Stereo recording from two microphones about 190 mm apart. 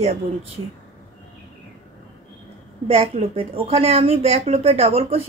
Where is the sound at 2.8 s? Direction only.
30° right (ahead or behind).